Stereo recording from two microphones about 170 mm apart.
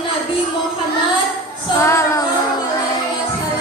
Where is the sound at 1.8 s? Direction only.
15° left (ahead or behind).